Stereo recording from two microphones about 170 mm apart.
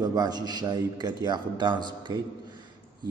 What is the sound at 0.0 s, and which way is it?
A man's voice, 25° right (ahead or behind).